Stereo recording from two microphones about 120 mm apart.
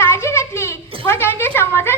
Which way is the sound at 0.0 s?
20° left (ahead or behind).